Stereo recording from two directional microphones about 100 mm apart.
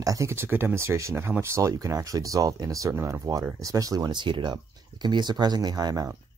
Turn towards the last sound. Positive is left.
turn(degrees=-40)  # may be behind; listen again after turning